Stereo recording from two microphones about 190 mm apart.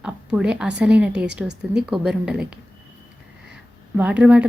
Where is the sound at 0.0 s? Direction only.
5° right (ahead or behind).